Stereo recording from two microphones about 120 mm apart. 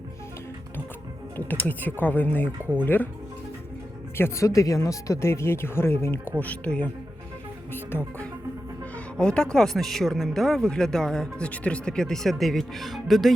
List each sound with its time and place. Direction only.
1.6 s speech: 15° left (ahead or behind)
4.2 s speech: 25° left (ahead or behind); by 13.3 s centre (ahead or behind)